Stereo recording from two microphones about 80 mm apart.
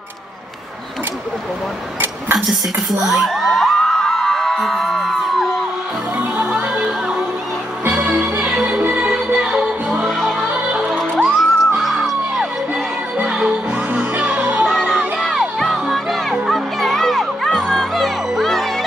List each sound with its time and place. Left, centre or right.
2.3 s a sound: centre
6.1 s music: centre
7.9 s music: centre
8.6 s music: centre
10.0 s music: centre
10.5 s music: centre
11.2 s music: centre
13.9 s music: centre
14.7 s crowd: centre